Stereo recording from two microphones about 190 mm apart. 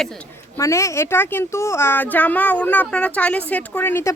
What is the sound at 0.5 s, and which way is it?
Speech, 15° left (ahead or behind).